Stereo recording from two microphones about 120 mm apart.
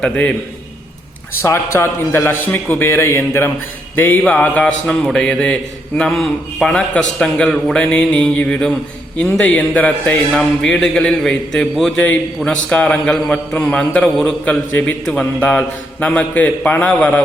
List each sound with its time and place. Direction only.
0.0 s a man's voice: 10° left (ahead or behind)
1.4 s a man's voice: 20° left (ahead or behind)
3.9 s mantra: 15° left (ahead or behind)
4.2 s a man's voice: 10° left (ahead or behind)